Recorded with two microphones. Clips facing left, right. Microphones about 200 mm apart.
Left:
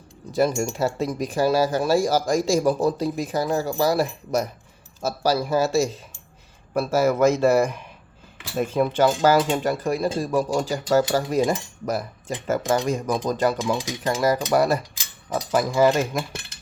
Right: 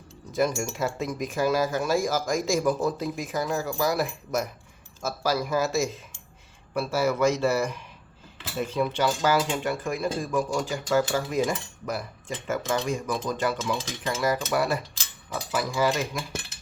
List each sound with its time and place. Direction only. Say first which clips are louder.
0.3 s speech: left 4 dB; 35° left (ahead or behind)
6.7 s speech: left 5 dB; 45° left (ahead or behind)